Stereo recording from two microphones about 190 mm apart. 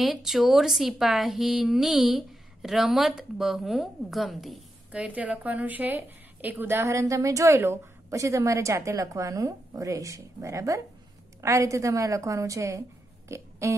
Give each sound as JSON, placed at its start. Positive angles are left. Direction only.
{"t": 0.0, "sound": "a woman's voice", "side_deg": 0}
{"t": 13.3, "sound": "burping", "side_deg": -15}